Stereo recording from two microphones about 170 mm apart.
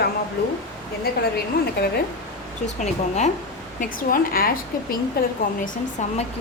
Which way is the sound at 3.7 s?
55° left (ahead or behind).